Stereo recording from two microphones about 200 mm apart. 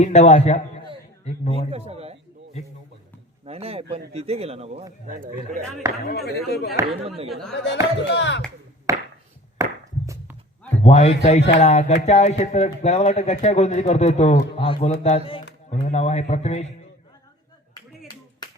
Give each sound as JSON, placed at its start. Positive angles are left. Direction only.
{"t": 0.0, "sound": "a man's voice", "side_deg": 35}
{"t": 1.7, "sound": "speech", "side_deg": -30}
{"t": 3.4, "sound": "a man's voice", "side_deg": -30}
{"t": 5.0, "sound": "speech", "side_deg": -40}
{"t": 6.1, "sound": "speech", "side_deg": 50}
{"t": 7.3, "sound": "speech", "side_deg": 0}
{"t": 7.5, "sound": "music", "side_deg": 60}
{"t": 8.9, "sound": "chop", "side_deg": -15}
{"t": 9.6, "sound": "a sound", "side_deg": -15}
{"t": 10.8, "sound": "a man's voice", "side_deg": 30}